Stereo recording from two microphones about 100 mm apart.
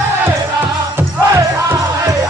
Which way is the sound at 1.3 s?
35° right (ahead or behind).